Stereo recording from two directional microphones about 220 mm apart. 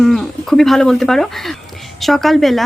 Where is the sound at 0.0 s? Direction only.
Centre (ahead or behind).